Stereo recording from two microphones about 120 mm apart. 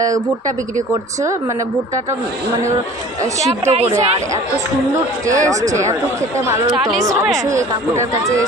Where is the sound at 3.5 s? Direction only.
60° right (ahead or behind).